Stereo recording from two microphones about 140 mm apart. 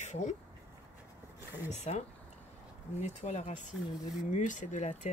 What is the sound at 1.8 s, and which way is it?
Speech, 55° left (ahead or behind).